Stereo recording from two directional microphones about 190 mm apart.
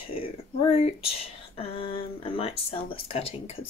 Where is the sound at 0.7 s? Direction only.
30° left (ahead or behind).